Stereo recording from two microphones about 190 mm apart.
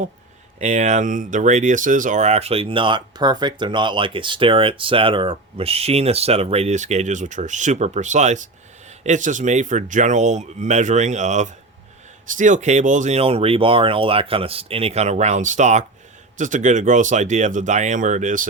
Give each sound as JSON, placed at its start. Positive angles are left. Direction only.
{"t": 0.6, "sound": "speech", "side_deg": -40}